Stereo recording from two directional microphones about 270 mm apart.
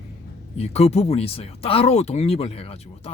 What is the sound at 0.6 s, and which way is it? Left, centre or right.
Speech, left.